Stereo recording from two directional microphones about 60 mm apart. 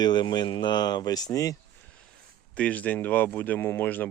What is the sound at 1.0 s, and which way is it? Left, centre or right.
Speech, left.